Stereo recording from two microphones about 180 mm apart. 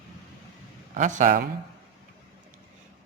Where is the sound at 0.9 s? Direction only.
45° right (ahead or behind).